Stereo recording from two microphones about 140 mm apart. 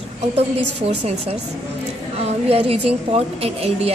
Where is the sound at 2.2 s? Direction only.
45° right (ahead or behind).